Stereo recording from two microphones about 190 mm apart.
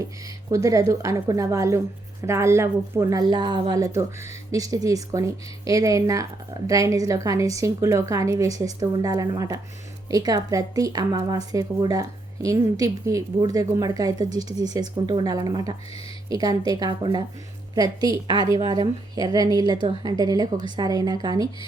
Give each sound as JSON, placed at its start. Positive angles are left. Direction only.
{"t": 0.5, "sound": "a woman's voice", "side_deg": -15}